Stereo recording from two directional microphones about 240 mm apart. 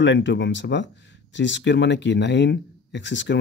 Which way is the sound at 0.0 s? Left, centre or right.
Left.